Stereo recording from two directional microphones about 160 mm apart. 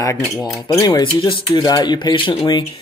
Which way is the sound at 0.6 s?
20° left (ahead or behind).